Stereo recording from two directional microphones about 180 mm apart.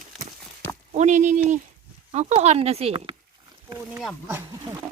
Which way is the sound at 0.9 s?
40° right (ahead or behind).